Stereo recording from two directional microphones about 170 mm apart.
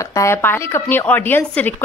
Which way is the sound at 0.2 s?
15° left (ahead or behind).